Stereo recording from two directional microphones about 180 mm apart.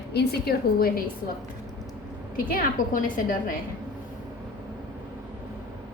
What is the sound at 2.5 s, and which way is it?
Speech, 50° left (ahead or behind).